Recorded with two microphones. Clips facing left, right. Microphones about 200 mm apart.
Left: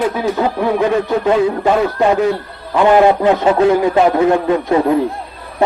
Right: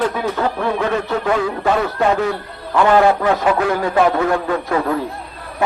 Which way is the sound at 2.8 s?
20° left (ahead or behind).